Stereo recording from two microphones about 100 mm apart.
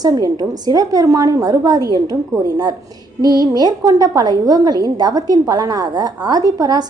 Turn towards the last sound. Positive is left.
turn(degrees=-40)  # may be behind; listen again after turning